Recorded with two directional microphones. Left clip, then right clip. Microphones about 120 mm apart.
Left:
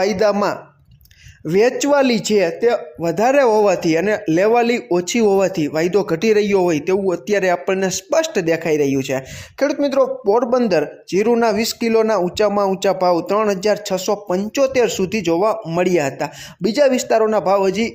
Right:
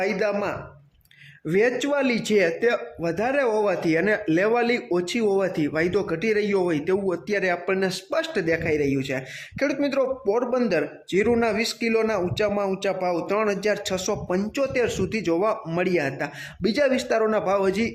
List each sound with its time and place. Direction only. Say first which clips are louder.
0.0 s a man's voice: left 8 dB; 40° left (ahead or behind)
2.0 s speech: left 8 dB; 50° left (ahead or behind)
2.2 s a man's voice: left 5 dB; 30° left (ahead or behind)
3.2 s a man's voice: left 9 dB; 45° left (ahead or behind)
6.1 s a man's voice: left 8 dB; 45° left (ahead or behind)
7.3 s a man's voice: left 7 dB; 45° left (ahead or behind)
8.1 s a man's voice: left 8 dB; 40° left (ahead or behind)
13.8 s a man's voice: left 6 dB; 25° left (ahead or behind)
14.6 s a man's voice: left 9 dB; 40° left (ahead or behind)
15.8 s a man's voice: left 8 dB; 40° left (ahead or behind); by 17.9 s 20° left (ahead or behind)